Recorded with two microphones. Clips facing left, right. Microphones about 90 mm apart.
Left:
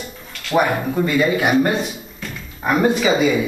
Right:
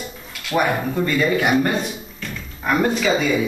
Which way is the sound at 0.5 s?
5° left (ahead or behind).